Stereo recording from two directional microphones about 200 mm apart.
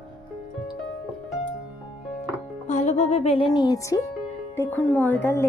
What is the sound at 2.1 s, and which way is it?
Music, 35° left (ahead or behind).